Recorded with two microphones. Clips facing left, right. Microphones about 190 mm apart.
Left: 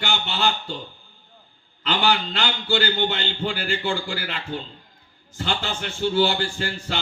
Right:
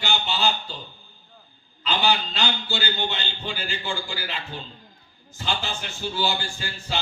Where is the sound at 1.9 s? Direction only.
55° left (ahead or behind).